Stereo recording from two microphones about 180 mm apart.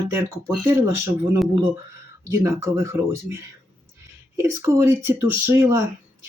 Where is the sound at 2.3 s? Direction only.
15° right (ahead or behind).